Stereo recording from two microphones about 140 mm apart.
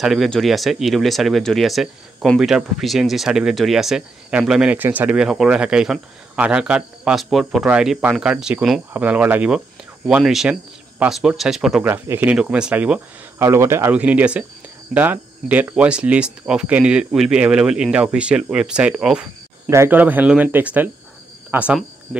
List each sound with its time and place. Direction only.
0.0 s speech: centre (ahead or behind)
11.8 s speech: 15° right (ahead or behind)
13.4 s speech: 20° right (ahead or behind)